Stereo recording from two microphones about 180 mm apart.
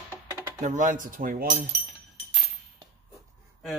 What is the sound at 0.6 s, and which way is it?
Speech, 45° right (ahead or behind).